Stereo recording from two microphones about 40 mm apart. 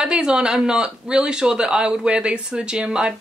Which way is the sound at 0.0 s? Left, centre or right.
Centre.